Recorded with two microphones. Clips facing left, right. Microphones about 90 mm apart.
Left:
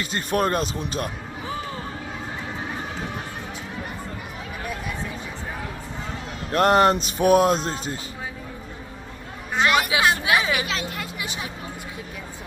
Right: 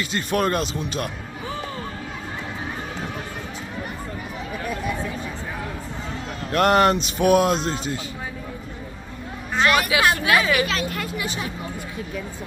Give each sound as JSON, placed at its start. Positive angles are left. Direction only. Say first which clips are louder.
{"t": 0.0, "sound": "speech", "louder": "right 1 dB", "side_deg": 35}
{"t": 6.5, "sound": "speech", "louder": "even", "side_deg": 25}
{"t": 7.0, "sound": "speech", "louder": "even", "side_deg": 40}
{"t": 9.6, "sound": "hubbub", "louder": "right 1 dB", "side_deg": 20}